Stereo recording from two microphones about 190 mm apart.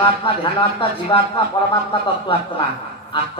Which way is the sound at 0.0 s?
25° left (ahead or behind).